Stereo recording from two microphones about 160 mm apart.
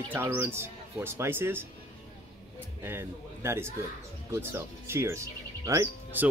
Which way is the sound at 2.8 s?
15° right (ahead or behind).